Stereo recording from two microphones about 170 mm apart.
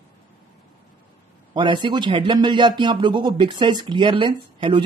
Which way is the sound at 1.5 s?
25° right (ahead or behind).